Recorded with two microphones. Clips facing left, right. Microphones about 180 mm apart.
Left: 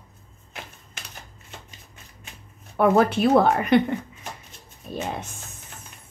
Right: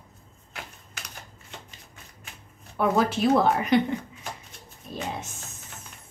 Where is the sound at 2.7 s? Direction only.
55° left (ahead or behind).